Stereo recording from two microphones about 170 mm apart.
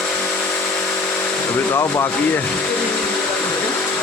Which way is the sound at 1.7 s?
15° left (ahead or behind).